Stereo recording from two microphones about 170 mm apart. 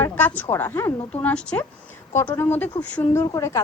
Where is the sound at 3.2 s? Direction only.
20° left (ahead or behind).